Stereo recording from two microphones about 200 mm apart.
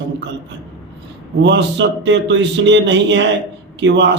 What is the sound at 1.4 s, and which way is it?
A man's voice, 60° right (ahead or behind).